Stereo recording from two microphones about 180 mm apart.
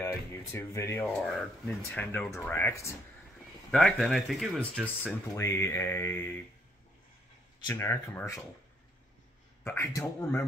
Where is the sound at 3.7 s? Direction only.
Centre (ahead or behind).